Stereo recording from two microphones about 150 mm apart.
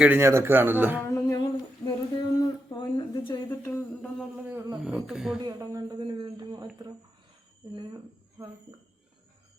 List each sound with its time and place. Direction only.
0.0 s speech: 15° right (ahead or behind)
1.0 s humming: 25° left (ahead or behind)
3.5 s humming: 15° left (ahead or behind)
4.4 s humming: 15° right (ahead or behind)
4.8 s speech: 5° right (ahead or behind)
5.4 s a sound: 25° right (ahead or behind)